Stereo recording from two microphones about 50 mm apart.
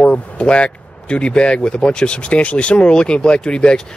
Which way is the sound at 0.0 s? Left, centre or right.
Left.